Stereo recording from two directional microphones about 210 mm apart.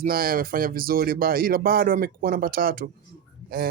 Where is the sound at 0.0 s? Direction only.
45° right (ahead or behind).